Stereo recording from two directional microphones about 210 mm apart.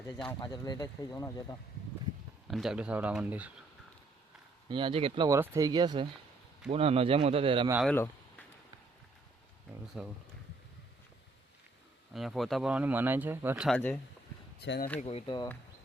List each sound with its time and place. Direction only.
0.3 s speech: 20° left (ahead or behind)
2.5 s speech: centre (ahead or behind)
4.7 s speech: 25° right (ahead or behind)
7.9 s a sound: 10° left (ahead or behind)
10.0 s speech: 5° right (ahead or behind)
12.1 s speech: centre (ahead or behind)
13.7 s speech: 5° left (ahead or behind)
14.6 s speech: 55° left (ahead or behind)
15.0 s speech: 25° left (ahead or behind)